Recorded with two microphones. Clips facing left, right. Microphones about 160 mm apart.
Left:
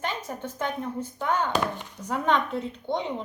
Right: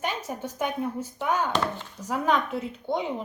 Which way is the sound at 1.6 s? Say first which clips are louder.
Even; 15° left (ahead or behind).